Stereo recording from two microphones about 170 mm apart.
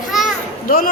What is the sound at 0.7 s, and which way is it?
Speech, 60° left (ahead or behind).